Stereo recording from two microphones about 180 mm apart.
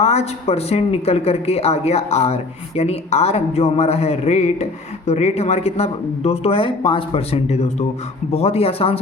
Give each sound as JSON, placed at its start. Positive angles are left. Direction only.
{"t": 0.0, "sound": "speech", "side_deg": 35}